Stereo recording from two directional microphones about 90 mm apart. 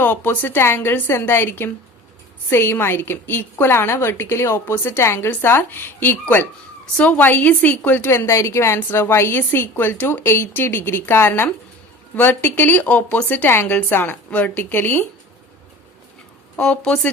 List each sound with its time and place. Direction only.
0.0 s a woman's voice: 20° left (ahead or behind)
16.6 s speech: 10° left (ahead or behind)